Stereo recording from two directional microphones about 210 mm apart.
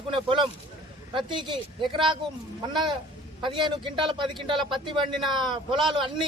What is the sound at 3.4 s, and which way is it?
A man's voice, 25° right (ahead or behind).